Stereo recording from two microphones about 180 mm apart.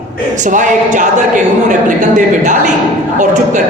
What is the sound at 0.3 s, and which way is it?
Speech, 45° right (ahead or behind).